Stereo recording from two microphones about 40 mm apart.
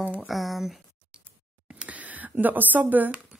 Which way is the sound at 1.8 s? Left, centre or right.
Right.